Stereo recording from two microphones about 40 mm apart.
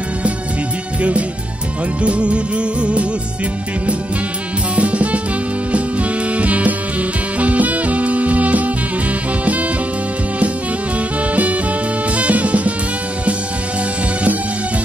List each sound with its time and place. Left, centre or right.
2.0 s music: right
4.7 s music: right
12.2 s music: right